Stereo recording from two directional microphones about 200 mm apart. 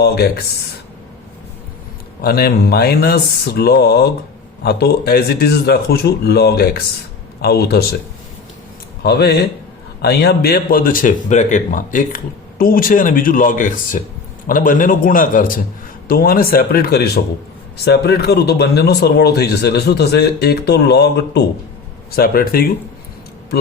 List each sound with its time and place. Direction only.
2.2 s speech: 50° left (ahead or behind)
9.0 s speech: 55° left (ahead or behind)